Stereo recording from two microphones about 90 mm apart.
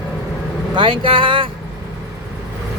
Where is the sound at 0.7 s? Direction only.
70° right (ahead or behind).